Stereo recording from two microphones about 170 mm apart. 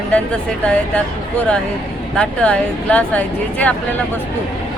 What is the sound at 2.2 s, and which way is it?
Speech, 5° left (ahead or behind).